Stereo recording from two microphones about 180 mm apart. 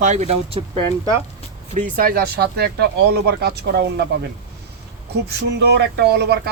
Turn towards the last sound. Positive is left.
turn(degrees=-65)  # may be behind; listen again after turning